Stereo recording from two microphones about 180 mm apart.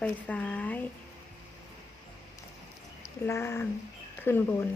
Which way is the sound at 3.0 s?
15° left (ahead or behind).